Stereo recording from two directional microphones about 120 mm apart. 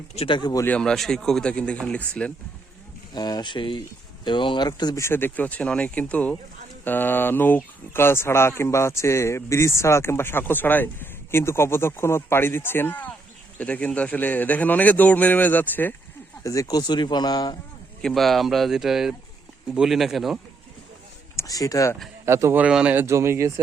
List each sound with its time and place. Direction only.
0.3 s speech: 35° left (ahead or behind)
0.6 s a man's voice: 10° left (ahead or behind)
3.2 s speech: 35° left (ahead or behind)
4.9 s a man's voice: 20° left (ahead or behind)
16.4 s speech: 30° left (ahead or behind)
18.0 s speech: centre (ahead or behind)
21.3 s speech: 30° left (ahead or behind)
22.3 s speech: 25° right (ahead or behind)
22.6 s speech: 10° right (ahead or behind)
23.0 s speech: 20° right (ahead or behind)